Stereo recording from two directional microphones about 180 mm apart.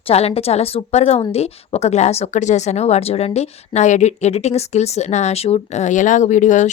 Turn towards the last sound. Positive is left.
turn(degrees=45)  # may be behind; listen again after turning